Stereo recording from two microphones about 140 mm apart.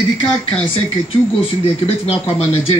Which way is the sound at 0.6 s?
45° left (ahead or behind).